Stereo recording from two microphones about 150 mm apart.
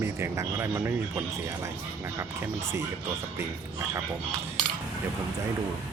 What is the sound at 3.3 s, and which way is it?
Speech, 20° right (ahead or behind).